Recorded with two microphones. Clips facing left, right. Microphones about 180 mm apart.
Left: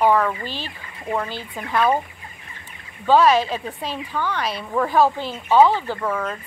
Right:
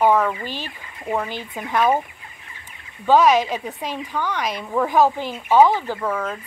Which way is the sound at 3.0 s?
15° right (ahead or behind).